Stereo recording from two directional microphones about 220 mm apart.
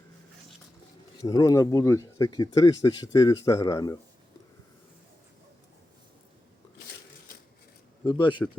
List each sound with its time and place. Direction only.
1.2 s speech: 15° left (ahead or behind)
8.0 s a man's voice: 20° left (ahead or behind)